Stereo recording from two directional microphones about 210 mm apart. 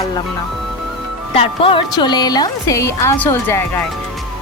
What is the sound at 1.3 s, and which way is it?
A woman's voice, 25° left (ahead or behind).